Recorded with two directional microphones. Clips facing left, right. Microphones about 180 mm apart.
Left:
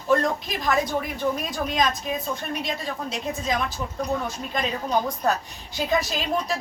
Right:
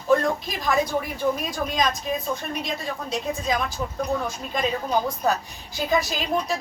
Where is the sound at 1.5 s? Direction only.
Centre (ahead or behind).